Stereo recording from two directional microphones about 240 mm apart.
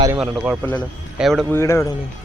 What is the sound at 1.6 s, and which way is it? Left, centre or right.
Speech, centre.